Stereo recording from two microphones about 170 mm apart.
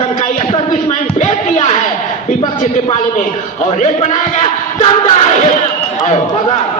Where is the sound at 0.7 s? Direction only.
45° left (ahead or behind).